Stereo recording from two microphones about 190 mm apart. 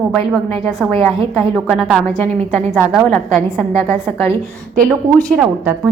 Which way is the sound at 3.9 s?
30° right (ahead or behind).